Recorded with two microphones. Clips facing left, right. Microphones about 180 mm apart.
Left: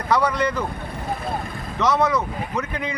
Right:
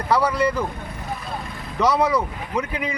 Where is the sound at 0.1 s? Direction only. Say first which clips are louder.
Right 1 dB; 10° right (ahead or behind).